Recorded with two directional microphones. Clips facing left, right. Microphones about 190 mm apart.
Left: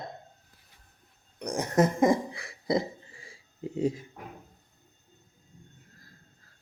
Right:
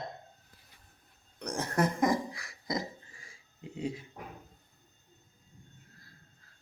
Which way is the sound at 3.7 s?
45° left (ahead or behind).